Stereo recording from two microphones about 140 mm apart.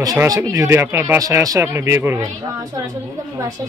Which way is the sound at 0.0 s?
25° right (ahead or behind).